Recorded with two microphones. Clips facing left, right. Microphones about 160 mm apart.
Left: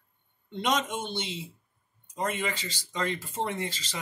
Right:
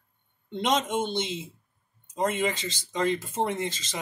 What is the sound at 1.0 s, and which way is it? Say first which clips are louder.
Speech: right 6 dB; 20° right (ahead or behind).